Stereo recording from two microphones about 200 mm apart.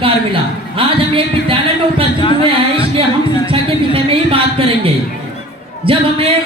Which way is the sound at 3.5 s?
25° right (ahead or behind).